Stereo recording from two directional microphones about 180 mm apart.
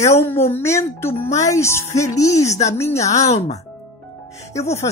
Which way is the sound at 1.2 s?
40° left (ahead or behind).